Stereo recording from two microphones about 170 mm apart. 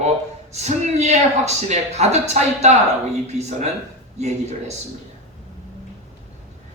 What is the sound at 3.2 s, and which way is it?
Speech, 40° right (ahead or behind).